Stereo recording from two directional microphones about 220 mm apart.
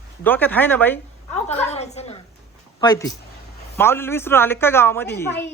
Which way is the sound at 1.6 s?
30° left (ahead or behind).